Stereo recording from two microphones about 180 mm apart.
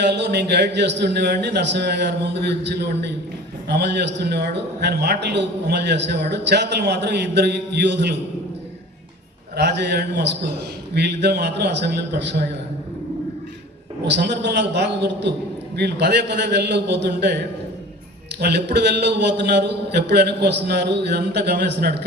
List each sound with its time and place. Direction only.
0.0 s a man's voice: 70° right (ahead or behind)
9.6 s a man's voice: 70° right (ahead or behind)
14.0 s a man's voice: 70° right (ahead or behind)